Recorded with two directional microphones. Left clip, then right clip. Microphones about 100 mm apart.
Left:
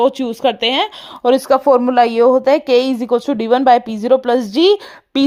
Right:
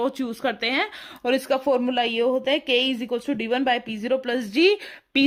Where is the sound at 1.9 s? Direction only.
50° left (ahead or behind).